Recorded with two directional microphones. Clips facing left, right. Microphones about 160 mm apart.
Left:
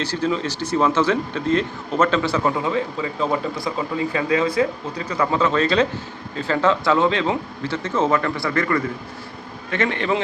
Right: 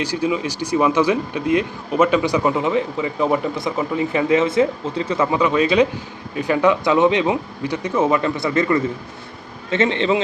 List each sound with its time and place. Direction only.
0.0 s a man's voice: 10° right (ahead or behind)